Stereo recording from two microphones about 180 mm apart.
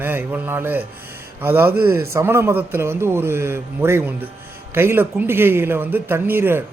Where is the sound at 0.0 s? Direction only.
10° right (ahead or behind).